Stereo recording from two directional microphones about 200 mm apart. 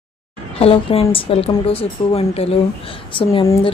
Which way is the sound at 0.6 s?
30° left (ahead or behind).